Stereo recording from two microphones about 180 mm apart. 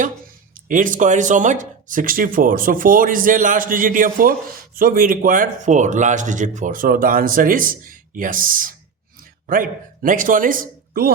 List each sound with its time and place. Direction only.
0.5 s a man's voice: 45° right (ahead or behind)